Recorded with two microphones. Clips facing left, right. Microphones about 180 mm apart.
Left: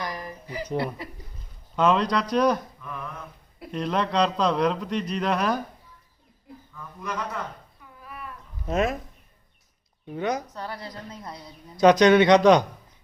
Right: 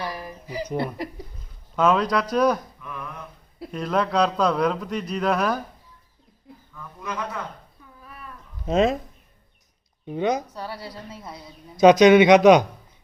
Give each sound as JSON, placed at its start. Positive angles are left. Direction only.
{"t": 0.2, "sound": "a sound", "side_deg": -10}
{"t": 1.7, "sound": "a man's voice", "side_deg": -5}
{"t": 3.7, "sound": "a man's voice", "side_deg": -5}
{"t": 8.6, "sound": "speech", "side_deg": -25}
{"t": 10.1, "sound": "speech", "side_deg": -20}
{"t": 10.5, "sound": "a man's voice", "side_deg": -10}
{"t": 11.8, "sound": "a man's voice", "side_deg": -15}